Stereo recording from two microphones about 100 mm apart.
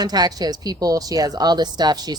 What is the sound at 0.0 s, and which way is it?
Speech, 40° right (ahead or behind).